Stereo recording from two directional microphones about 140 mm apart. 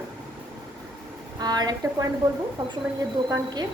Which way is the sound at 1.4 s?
30° right (ahead or behind).